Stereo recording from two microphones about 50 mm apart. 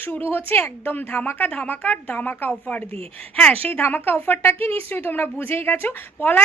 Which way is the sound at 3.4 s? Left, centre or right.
Left.